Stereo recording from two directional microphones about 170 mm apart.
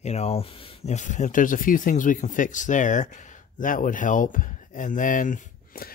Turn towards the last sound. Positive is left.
turn(degrees=55)  # may be behind; listen again after turning